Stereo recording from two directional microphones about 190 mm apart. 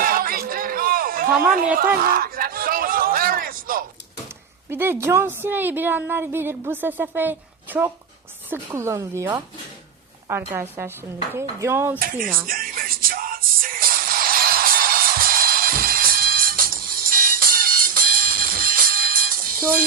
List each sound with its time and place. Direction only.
0.0 s a sound: 50° right (ahead or behind)
4.7 s a woman's voice: 10° right (ahead or behind)
12.5 s music: 50° right (ahead or behind)